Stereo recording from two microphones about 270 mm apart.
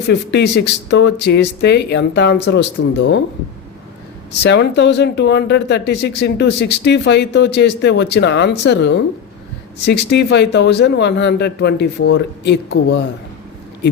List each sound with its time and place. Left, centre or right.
0.1 s speech: left
4.4 s speech: left